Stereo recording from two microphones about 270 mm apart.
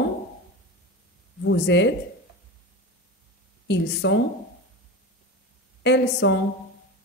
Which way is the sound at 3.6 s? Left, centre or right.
Left.